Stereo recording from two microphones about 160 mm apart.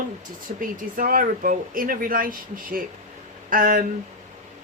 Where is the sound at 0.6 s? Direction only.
60° right (ahead or behind).